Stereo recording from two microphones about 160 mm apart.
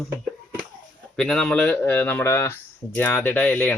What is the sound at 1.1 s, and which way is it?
Speech, 5° left (ahead or behind).